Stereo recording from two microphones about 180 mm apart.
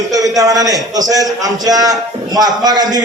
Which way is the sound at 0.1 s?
20° right (ahead or behind).